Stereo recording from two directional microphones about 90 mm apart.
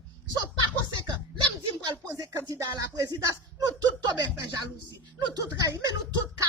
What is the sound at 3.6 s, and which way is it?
Speech, 55° right (ahead or behind).